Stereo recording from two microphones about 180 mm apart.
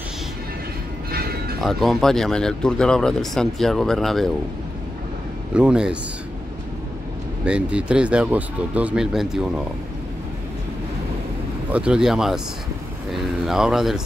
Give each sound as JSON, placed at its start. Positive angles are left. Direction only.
{"t": 1.1, "sound": "music", "side_deg": -60}
{"t": 1.6, "sound": "speech", "side_deg": 0}
{"t": 5.5, "sound": "speech", "side_deg": -5}
{"t": 7.4, "sound": "speech", "side_deg": -5}
{"t": 11.7, "sound": "speech", "side_deg": -5}